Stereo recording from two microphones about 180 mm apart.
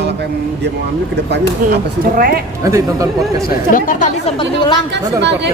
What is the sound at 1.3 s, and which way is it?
A woman's voice, 55° right (ahead or behind).